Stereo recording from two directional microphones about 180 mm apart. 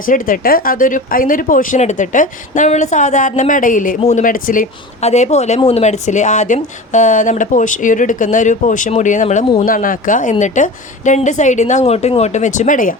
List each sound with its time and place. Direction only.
0.0 s speech: 50° left (ahead or behind)